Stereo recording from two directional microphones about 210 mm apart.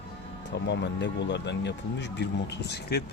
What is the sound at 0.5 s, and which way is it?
Speech, 55° left (ahead or behind).